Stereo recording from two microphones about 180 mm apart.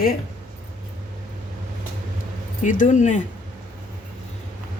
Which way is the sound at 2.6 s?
45° left (ahead or behind).